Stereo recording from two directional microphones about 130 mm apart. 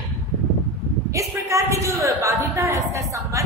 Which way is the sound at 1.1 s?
25° right (ahead or behind).